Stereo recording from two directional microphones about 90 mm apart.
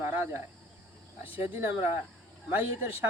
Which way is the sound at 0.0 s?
25° right (ahead or behind).